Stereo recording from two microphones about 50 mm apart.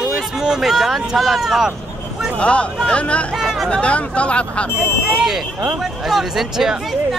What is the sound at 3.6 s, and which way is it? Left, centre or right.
Speech, left.